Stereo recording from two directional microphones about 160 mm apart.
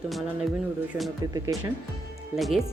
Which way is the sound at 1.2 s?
20° right (ahead or behind).